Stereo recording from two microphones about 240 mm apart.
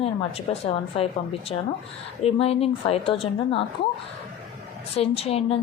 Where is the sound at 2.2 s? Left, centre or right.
Left.